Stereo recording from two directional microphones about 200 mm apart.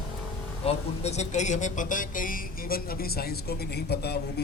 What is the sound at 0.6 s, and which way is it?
A man's voice, 30° left (ahead or behind).